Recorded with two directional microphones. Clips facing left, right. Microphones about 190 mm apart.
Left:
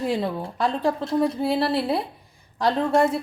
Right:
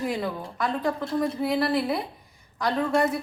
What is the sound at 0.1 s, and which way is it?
A woman's voice, 30° left (ahead or behind).